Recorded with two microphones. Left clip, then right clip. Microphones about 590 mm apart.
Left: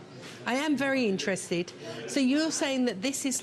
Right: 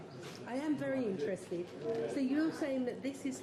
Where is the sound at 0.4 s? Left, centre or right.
Left.